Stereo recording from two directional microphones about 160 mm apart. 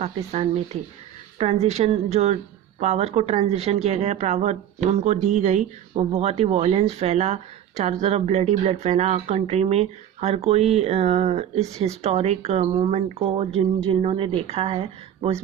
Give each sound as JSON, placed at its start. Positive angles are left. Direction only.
{"t": 0.0, "sound": "speech", "side_deg": -40}